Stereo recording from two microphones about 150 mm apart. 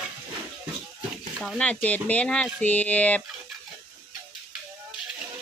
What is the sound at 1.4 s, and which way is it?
Speech, 5° left (ahead or behind).